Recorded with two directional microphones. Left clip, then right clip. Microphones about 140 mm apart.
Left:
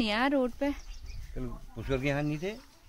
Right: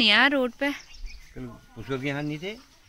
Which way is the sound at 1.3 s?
50° left (ahead or behind).